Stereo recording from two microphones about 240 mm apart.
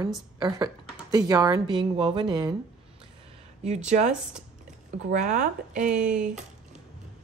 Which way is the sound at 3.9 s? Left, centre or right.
Right.